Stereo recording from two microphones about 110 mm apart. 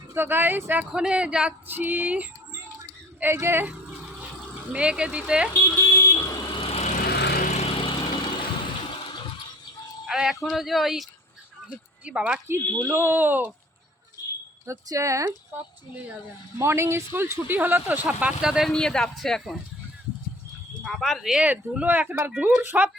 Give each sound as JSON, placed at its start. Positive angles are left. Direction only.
{"t": 0.1, "sound": "speech", "side_deg": -20}
{"t": 3.7, "sound": "a sound", "side_deg": -10}
{"t": 4.7, "sound": "speech", "side_deg": -10}
{"t": 5.6, "sound": "vehicle", "side_deg": 25}
{"t": 6.5, "sound": "vehicle", "side_deg": 60}
{"t": 10.1, "sound": "speech", "side_deg": -5}
{"t": 14.7, "sound": "speech", "side_deg": -30}
{"t": 16.6, "sound": "speech", "side_deg": -25}
{"t": 18.7, "sound": "speech", "side_deg": 5}
{"t": 20.8, "sound": "speech", "side_deg": 0}